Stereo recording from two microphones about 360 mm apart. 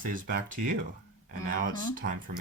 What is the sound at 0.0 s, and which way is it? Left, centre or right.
Speech, right.